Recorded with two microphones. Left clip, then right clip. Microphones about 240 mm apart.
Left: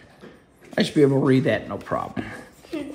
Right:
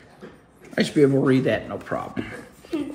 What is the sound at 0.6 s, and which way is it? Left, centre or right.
Speech, left.